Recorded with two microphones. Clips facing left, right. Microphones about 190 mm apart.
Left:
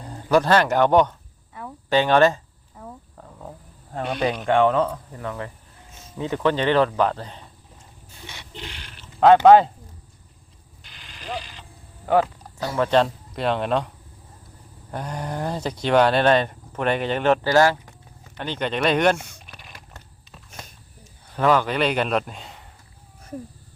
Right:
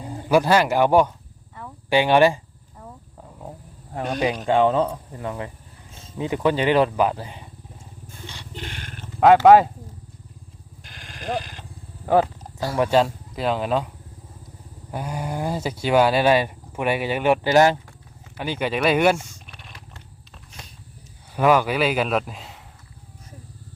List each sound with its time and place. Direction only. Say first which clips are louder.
0.0 s speech: even; 5° right (ahead or behind)
3.2 s a sound: right 1 dB; 10° right (ahead or behind)
3.9 s speech: right 1 dB; 15° right (ahead or behind)
4.6 s speech: even; 25° right (ahead or behind); by 7.5 s 10° right (ahead or behind)
8.5 s roaring cats: right 4 dB; 50° right (ahead or behind)
10.8 s sheep: right 5 dB; 45° right (ahead or behind)
12.0 s wild animals: right 1 dB; 25° right (ahead or behind)
12.8 s speech: even; 5° right (ahead or behind)
19.5 s a sound: even; centre (ahead or behind)
21.3 s speech: right 1 dB; 10° right (ahead or behind)